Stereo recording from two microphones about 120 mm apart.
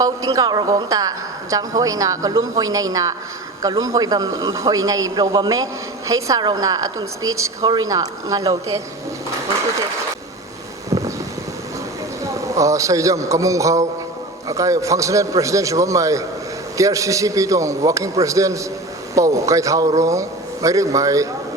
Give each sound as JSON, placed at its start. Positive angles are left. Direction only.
{"t": 0.3, "sound": "a woman's voice", "side_deg": -30}
{"t": 12.2, "sound": "a man's voice", "side_deg": -25}